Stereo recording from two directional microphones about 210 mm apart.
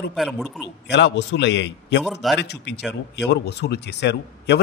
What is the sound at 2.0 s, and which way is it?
Speech, centre (ahead or behind).